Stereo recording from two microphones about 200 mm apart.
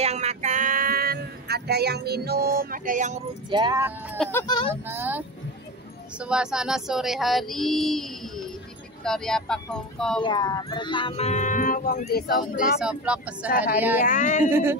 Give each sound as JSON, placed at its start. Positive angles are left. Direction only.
{"t": 0.0, "sound": "female singing", "side_deg": -35}
{"t": 3.4, "sound": "speech", "side_deg": -20}
{"t": 4.2, "sound": "speech", "side_deg": 10}
{"t": 4.8, "sound": "speech", "side_deg": -10}
{"t": 6.1, "sound": "a sound", "side_deg": -5}
{"t": 10.2, "sound": "speech", "side_deg": 20}
{"t": 12.8, "sound": "a sound", "side_deg": -5}
{"t": 13.7, "sound": "speech", "side_deg": -10}
{"t": 14.0, "sound": "a woman's voice", "side_deg": 40}
{"t": 14.4, "sound": "speech", "side_deg": -10}